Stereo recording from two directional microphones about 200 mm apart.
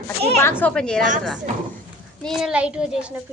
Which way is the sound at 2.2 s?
Centre (ahead or behind).